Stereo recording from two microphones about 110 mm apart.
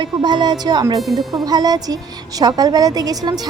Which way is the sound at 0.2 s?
45° right (ahead or behind).